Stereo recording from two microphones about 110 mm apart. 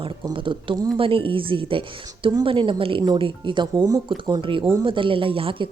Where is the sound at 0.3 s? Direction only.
50° right (ahead or behind).